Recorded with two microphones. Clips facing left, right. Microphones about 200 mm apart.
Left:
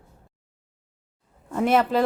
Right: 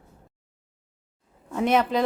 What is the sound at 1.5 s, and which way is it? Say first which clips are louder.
Speech: left 1 dB; 5° left (ahead or behind).